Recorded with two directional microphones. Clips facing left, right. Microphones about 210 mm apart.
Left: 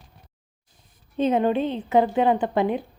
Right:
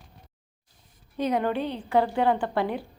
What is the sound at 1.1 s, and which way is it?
A woman's voice, 25° left (ahead or behind).